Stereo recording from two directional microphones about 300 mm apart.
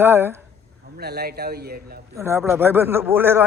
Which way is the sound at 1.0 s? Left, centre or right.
Right.